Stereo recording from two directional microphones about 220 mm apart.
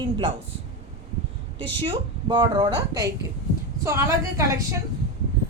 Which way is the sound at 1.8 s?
20° right (ahead or behind).